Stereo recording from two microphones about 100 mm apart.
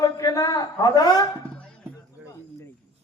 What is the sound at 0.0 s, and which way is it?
Music, 40° left (ahead or behind).